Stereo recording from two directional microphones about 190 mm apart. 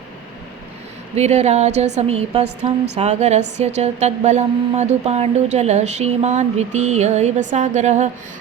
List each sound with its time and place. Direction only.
1.1 s a woman's voice: 35° right (ahead or behind)